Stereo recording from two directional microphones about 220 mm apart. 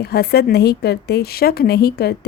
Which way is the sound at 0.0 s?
45° left (ahead or behind).